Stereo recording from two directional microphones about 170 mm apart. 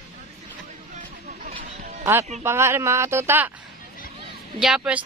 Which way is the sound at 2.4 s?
15° right (ahead or behind).